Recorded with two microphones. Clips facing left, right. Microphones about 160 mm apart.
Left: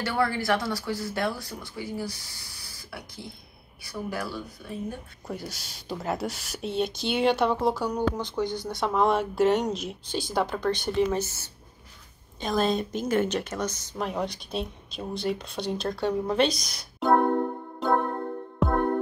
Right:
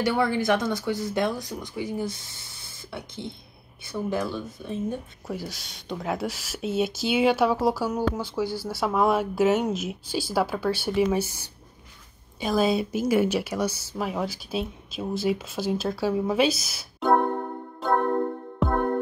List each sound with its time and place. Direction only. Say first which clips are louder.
0.0 s speech: right 3 dB; 20° right (ahead or behind)
5.3 s speech: right 2 dB; centre (ahead or behind)